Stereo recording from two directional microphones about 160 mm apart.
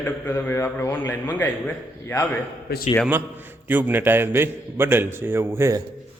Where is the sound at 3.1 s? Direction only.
10° right (ahead or behind).